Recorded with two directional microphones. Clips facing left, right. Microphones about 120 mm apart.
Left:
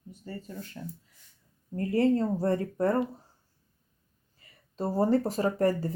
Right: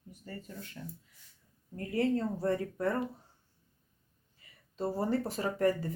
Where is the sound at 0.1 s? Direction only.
30° left (ahead or behind).